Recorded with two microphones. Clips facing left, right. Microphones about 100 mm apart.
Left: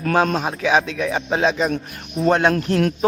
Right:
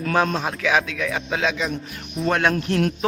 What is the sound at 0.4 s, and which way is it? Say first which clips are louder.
Speech: left 3 dB; 25° left (ahead or behind).